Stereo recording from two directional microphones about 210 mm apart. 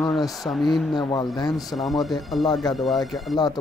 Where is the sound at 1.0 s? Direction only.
20° left (ahead or behind).